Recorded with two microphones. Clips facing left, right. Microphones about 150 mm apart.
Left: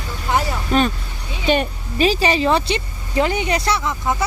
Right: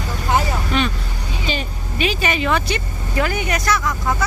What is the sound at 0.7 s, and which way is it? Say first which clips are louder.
Speech: left 4 dB; 40° left (ahead or behind).